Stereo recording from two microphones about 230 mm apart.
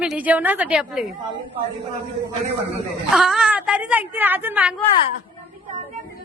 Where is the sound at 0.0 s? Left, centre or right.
Centre.